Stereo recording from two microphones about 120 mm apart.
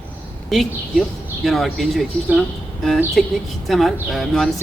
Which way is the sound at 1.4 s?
Centre (ahead or behind).